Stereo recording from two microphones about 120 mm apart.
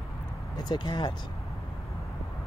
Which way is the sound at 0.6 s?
40° left (ahead or behind).